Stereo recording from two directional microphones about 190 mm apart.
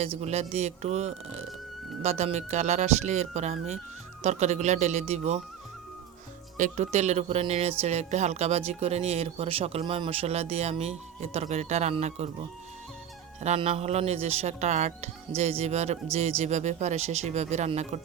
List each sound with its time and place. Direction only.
0.0 s speech: 35° right (ahead or behind)
6.6 s speech: 40° right (ahead or behind)
13.4 s speech: 35° right (ahead or behind)